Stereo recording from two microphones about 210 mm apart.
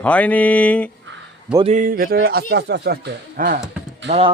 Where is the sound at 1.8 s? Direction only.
45° right (ahead or behind).